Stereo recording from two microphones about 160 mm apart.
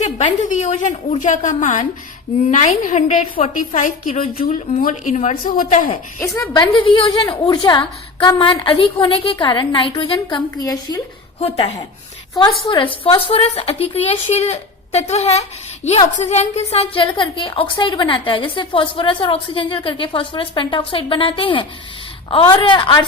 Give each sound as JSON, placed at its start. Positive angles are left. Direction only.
{"t": 0.0, "sound": "a woman's voice", "side_deg": 50}
{"t": 4.8, "sound": "a woman's voice", "side_deg": 55}
{"t": 6.1, "sound": "a woman's voice", "side_deg": 20}
{"t": 11.3, "sound": "a woman's voice", "side_deg": 40}